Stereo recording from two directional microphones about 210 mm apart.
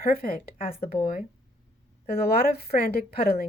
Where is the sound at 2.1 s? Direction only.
45° left (ahead or behind).